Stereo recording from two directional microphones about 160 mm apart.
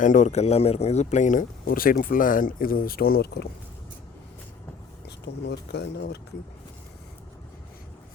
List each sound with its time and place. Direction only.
0.0 s speech: 50° left (ahead or behind); by 3.5 s 80° left
5.0 s speech: 90° left